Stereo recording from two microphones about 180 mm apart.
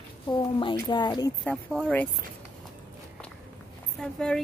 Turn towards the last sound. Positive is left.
turn(degrees=5)  # may be behind; listen again after turning